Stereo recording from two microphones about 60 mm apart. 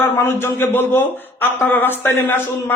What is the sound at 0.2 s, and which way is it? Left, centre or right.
A man's voice, left.